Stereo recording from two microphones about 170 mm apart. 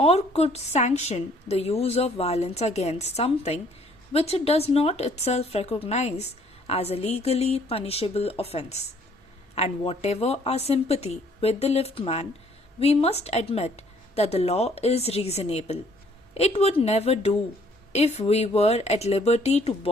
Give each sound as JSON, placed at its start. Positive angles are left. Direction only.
{"t": 0.0, "sound": "a woman's voice", "side_deg": 40}